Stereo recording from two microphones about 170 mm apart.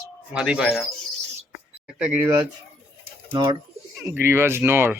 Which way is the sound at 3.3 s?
25° right (ahead or behind).